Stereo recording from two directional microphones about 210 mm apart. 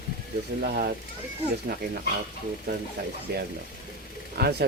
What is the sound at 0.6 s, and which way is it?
Speech, 50° right (ahead or behind).